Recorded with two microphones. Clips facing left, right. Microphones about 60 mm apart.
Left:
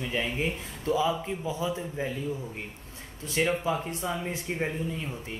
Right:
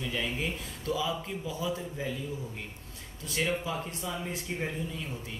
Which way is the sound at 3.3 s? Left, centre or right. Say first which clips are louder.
Left 4 dB; left.